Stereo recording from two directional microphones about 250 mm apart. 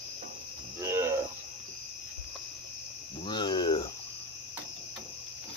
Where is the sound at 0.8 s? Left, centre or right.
Centre.